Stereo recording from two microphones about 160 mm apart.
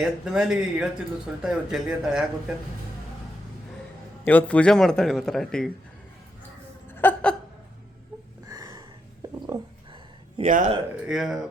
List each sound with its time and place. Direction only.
0.0 s speech: 5° right (ahead or behind)
4.2 s speech: 10° left (ahead or behind)
6.8 s a sound: 15° left (ahead or behind)
8.4 s a sound: 20° right (ahead or behind)
9.5 s speech: 20° right (ahead or behind)
10.4 s a man's voice: 50° right (ahead or behind)
11.0 s speech: centre (ahead or behind)